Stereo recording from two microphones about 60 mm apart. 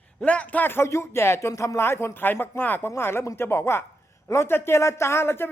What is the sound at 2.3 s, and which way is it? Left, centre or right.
Speech, left.